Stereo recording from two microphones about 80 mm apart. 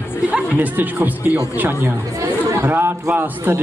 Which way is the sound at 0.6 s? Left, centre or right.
Right.